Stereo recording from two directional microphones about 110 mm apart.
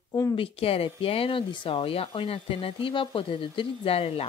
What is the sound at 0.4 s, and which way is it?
A woman's voice, 60° left (ahead or behind).